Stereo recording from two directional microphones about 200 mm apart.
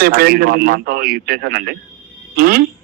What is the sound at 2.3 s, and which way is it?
Music, 50° right (ahead or behind).